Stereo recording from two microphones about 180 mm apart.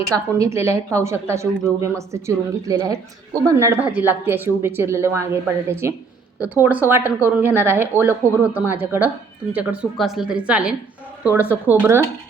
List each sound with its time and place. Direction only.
0.3 s a woman's voice: 15° right (ahead or behind)